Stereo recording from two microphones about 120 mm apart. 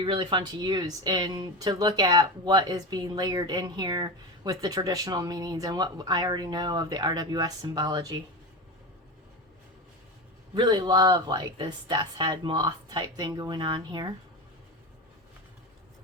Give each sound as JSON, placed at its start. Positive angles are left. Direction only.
{"t": 0.0, "sound": "speech", "side_deg": -40}
{"t": 10.5, "sound": "speech", "side_deg": -40}